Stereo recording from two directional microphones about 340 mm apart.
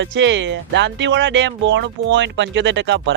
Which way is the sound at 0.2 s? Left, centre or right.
Right.